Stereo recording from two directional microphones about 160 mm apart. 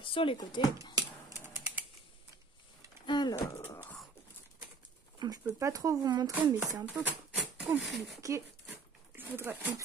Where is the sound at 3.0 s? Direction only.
25° left (ahead or behind).